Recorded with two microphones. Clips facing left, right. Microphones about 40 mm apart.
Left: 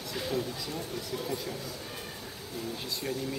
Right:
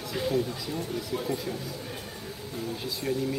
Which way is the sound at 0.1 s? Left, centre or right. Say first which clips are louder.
Right 5 dB; centre.